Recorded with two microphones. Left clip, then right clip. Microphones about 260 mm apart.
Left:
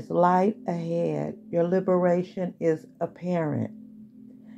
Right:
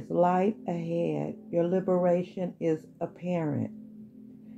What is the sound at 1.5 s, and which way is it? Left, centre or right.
Speech, centre.